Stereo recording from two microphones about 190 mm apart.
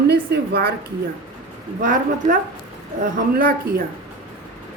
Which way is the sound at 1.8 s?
45° right (ahead or behind).